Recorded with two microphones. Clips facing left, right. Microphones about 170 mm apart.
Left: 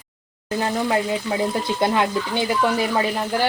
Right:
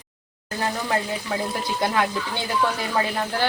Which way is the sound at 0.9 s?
15° left (ahead or behind).